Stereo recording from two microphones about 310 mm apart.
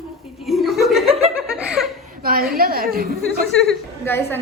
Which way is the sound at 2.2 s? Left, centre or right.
Right.